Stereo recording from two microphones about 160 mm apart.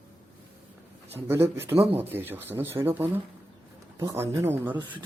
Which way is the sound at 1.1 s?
15° right (ahead or behind).